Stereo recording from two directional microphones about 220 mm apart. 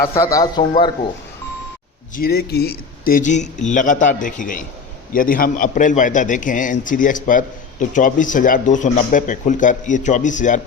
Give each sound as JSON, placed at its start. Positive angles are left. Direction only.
{"t": 0.0, "sound": "a man's voice", "side_deg": 15}
{"t": 2.1, "sound": "a man's voice", "side_deg": 45}